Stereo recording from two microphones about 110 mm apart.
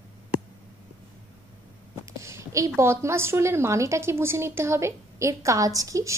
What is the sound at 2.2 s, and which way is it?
A woman's voice, 25° right (ahead or behind).